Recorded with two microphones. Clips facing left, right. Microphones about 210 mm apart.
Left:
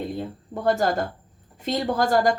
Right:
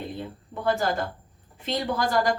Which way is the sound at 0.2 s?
45° left (ahead or behind).